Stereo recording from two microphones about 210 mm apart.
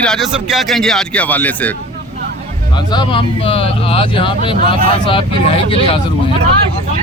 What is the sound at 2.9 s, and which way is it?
Speech, 20° left (ahead or behind).